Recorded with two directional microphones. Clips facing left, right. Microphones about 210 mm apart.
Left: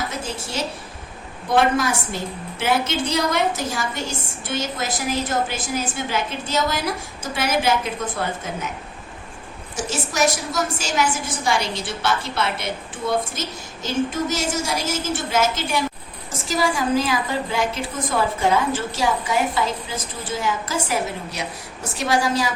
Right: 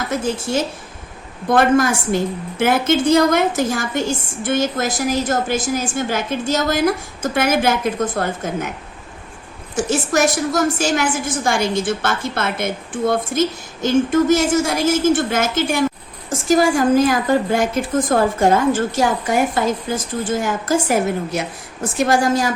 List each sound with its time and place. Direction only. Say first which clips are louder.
0.1 s a woman's voice: right 9 dB; 50° right (ahead or behind)
9.7 s a woman's voice: right 6 dB; 50° right (ahead or behind)